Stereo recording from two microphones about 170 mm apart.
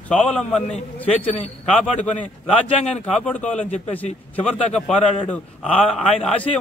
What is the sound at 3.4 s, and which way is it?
Speech, 45° left (ahead or behind).